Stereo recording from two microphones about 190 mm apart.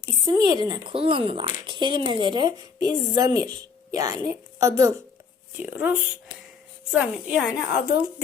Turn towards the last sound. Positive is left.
turn(degrees=0)  # may be behind; listen again after turning